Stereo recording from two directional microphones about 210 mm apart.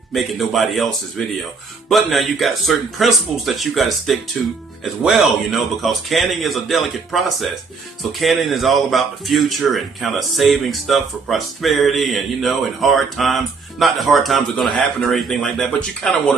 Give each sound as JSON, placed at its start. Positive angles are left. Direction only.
{"t": 0.1, "sound": "speech", "side_deg": 0}